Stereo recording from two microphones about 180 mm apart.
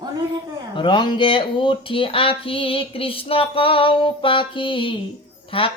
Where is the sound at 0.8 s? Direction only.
25° left (ahead or behind).